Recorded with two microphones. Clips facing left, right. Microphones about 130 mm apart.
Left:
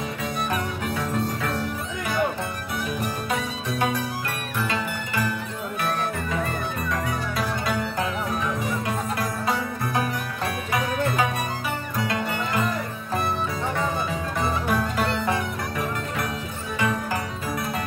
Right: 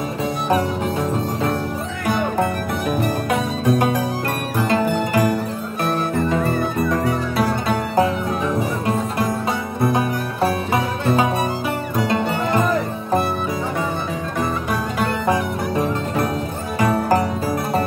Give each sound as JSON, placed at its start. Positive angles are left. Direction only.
{"t": 0.5, "sound": "music", "side_deg": -30}
{"t": 3.3, "sound": "music", "side_deg": -50}
{"t": 9.8, "sound": "music", "side_deg": -30}
{"t": 15.7, "sound": "music", "side_deg": -25}
{"t": 16.8, "sound": "music", "side_deg": -40}